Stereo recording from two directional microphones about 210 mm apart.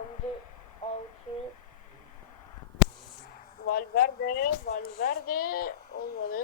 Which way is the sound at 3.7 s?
45° left (ahead or behind).